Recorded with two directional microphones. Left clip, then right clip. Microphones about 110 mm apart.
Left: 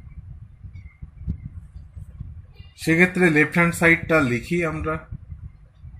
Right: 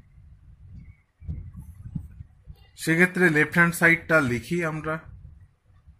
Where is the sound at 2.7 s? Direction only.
60° right (ahead or behind).